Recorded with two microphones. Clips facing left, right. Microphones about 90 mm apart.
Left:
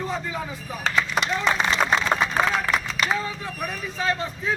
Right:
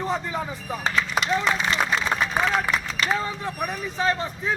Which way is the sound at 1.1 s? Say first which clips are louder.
Right 1 dB; centre (ahead or behind).